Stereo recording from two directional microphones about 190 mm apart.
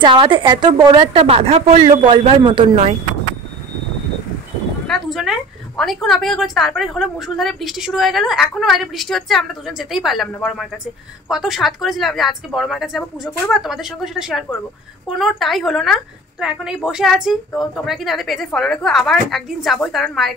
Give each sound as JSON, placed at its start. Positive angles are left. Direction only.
{"t": 0.0, "sound": "a woman's voice", "side_deg": -25}
{"t": 4.8, "sound": "a sound", "side_deg": 0}
{"t": 5.8, "sound": "a woman's voice", "side_deg": 0}